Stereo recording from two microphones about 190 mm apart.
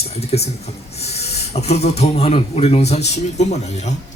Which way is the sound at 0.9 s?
35° left (ahead or behind).